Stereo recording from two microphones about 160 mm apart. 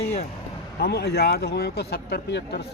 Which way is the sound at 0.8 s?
90° left.